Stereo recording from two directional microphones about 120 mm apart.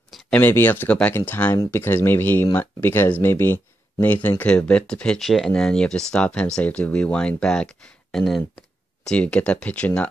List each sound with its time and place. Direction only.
0.3 s speech: 15° left (ahead or behind)